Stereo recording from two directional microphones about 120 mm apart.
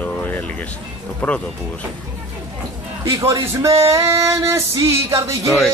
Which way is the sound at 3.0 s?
25° right (ahead or behind).